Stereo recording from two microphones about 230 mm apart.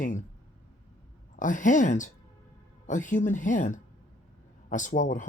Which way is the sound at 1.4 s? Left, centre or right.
Left.